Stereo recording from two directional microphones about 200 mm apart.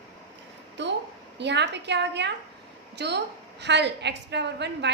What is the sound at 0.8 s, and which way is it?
A woman's voice, 60° right (ahead or behind).